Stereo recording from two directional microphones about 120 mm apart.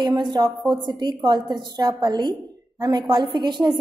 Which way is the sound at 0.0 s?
40° right (ahead or behind).